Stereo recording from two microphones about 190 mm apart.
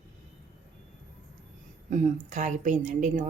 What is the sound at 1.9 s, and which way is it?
A woman's voice, 40° right (ahead or behind).